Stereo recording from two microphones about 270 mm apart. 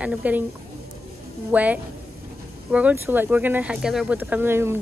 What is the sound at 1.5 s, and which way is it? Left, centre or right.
A woman's voice, centre.